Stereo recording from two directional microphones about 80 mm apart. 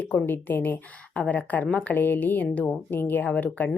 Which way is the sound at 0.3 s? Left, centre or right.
Left.